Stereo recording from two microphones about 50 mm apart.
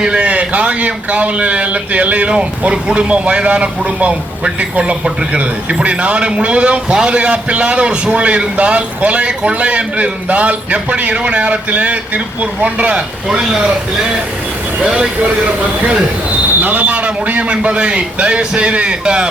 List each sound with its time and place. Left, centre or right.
0.0 s a man's voice: right
14.8 s speech: centre
16.6 s a man's voice: right